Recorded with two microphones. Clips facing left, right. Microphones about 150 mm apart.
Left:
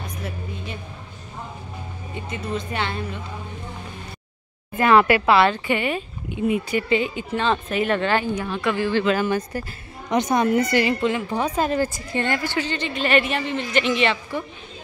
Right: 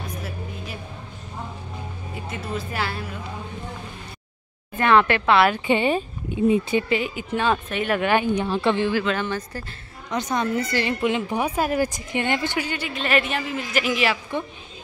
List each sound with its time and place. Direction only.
0.0 s music: centre (ahead or behind)
2.1 s a woman's voice: centre (ahead or behind)
4.7 s a woman's voice: 5° left (ahead or behind)
5.7 s speech: 30° right (ahead or behind)
6.9 s a woman's voice: 5° right (ahead or behind)
8.0 s speech: 15° right (ahead or behind)
8.5 s speech: 30° right (ahead or behind)
9.0 s a woman's voice: 5° left (ahead or behind)
11.0 s speech: 15° right (ahead or behind)